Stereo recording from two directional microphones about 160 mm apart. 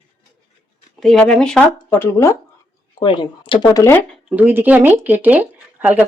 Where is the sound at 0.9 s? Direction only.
Centre (ahead or behind).